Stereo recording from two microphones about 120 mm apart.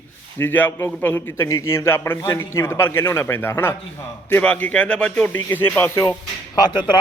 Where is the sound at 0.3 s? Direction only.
15° left (ahead or behind).